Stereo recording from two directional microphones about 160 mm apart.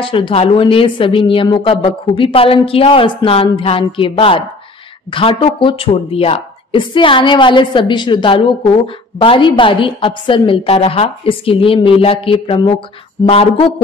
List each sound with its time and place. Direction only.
0.0 s a woman's voice: 35° left (ahead or behind)